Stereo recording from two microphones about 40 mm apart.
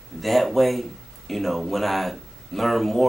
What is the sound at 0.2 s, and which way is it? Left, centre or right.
Speech, centre.